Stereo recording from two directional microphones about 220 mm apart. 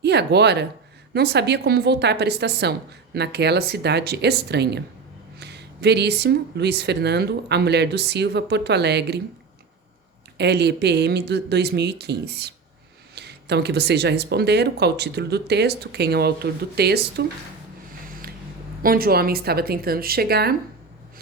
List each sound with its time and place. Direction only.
0.0 s speech: 50° right (ahead or behind)
10.3 s speech: 50° right (ahead or behind)
18.8 s speech: 40° right (ahead or behind)